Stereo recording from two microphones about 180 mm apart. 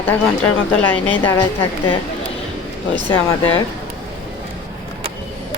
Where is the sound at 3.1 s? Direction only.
30° left (ahead or behind).